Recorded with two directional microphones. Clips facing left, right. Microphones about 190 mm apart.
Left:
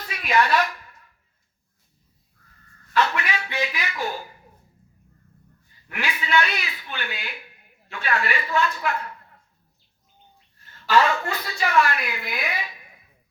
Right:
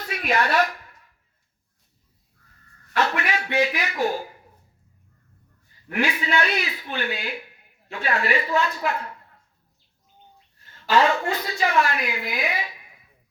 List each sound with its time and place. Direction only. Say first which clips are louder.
0.1 s a woman's voice: left 1 dB; 45° right (ahead or behind)
2.9 s a man's voice: even; 50° right (ahead or behind)
5.9 s speech: right 1 dB; 35° right (ahead or behind)
10.9 s a woman's voice: right 1 dB; 20° right (ahead or behind)